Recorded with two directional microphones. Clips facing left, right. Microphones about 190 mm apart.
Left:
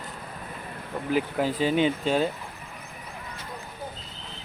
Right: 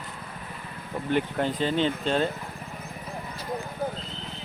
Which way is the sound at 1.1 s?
5° left (ahead or behind).